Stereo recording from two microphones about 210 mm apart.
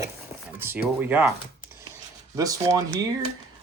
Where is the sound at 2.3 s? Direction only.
15° right (ahead or behind).